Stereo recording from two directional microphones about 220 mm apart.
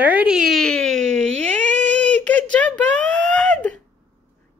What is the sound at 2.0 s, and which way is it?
Speech, 5° left (ahead or behind).